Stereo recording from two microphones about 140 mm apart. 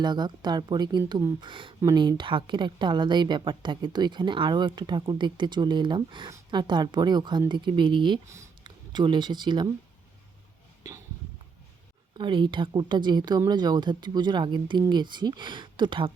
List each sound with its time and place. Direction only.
0.0 s a woman's voice: 30° right (ahead or behind)
12.1 s a woman's voice: 35° right (ahead or behind)